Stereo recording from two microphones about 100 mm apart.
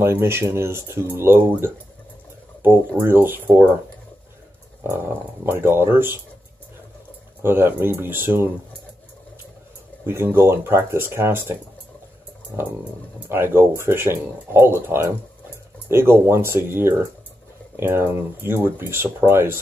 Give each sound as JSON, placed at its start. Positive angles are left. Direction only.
{"t": 0.0, "sound": "speech", "side_deg": -25}
{"t": 3.0, "sound": "speech", "side_deg": -20}
{"t": 4.9, "sound": "speech", "side_deg": -25}
{"t": 7.4, "sound": "speech", "side_deg": -20}
{"t": 10.0, "sound": "speech", "side_deg": -25}
{"t": 12.5, "sound": "speech", "side_deg": -20}